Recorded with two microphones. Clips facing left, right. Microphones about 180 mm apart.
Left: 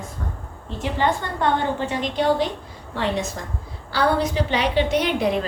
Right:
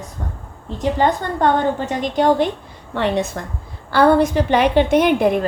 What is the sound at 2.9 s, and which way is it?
A woman's voice, 60° right (ahead or behind).